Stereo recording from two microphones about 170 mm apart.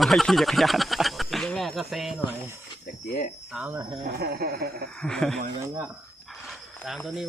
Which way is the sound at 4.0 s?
65° right (ahead or behind).